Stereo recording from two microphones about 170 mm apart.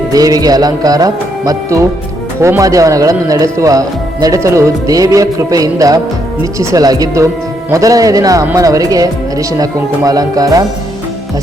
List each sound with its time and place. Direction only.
0.1 s speech: 20° right (ahead or behind)